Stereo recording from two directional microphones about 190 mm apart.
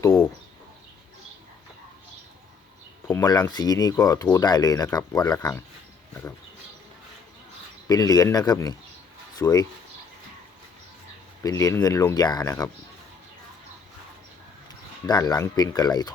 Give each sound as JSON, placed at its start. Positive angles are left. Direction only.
{"t": 3.1, "sound": "speech", "side_deg": 20}
{"t": 7.9, "sound": "speech", "side_deg": 20}
{"t": 11.4, "sound": "speech", "side_deg": 15}
{"t": 15.0, "sound": "speech", "side_deg": 20}